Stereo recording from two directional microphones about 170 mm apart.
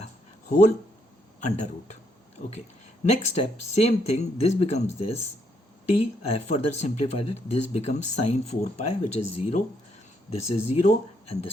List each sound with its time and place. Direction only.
0.0 s a sound: 45° left (ahead or behind)
1.4 s speech: 45° left (ahead or behind)
3.1 s speech: 40° left (ahead or behind)
6.0 s speech: 40° left (ahead or behind)